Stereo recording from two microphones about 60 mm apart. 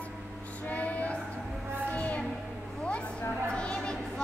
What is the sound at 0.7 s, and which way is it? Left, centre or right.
Music, left.